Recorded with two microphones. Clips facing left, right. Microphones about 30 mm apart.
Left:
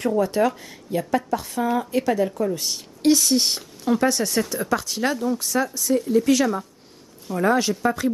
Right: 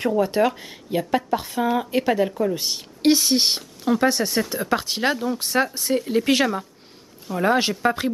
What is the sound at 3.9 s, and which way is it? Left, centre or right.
Speech, centre.